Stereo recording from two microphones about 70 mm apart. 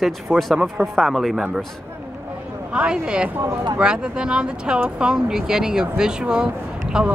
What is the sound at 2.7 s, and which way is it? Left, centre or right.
Speech, centre.